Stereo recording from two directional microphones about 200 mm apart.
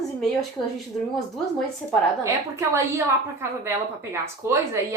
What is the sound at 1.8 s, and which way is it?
Speech, 5° left (ahead or behind).